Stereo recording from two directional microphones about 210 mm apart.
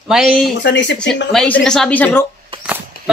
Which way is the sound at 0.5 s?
60° left (ahead or behind).